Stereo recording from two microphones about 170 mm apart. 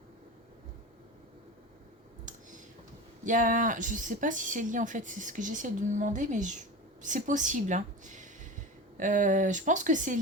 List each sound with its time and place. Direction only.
3.2 s speech: 50° right (ahead or behind)